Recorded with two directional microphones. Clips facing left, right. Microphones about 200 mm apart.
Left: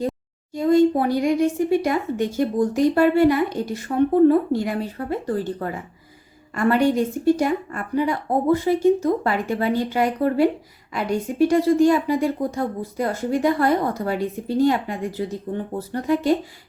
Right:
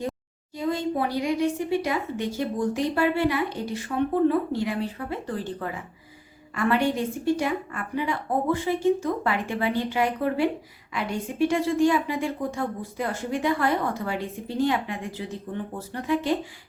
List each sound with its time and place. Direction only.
0.5 s a woman's voice: 45° left (ahead or behind)